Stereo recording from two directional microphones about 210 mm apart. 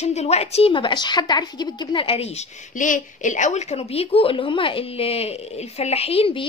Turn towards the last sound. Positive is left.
turn(degrees=25)  # may be behind; listen again after turning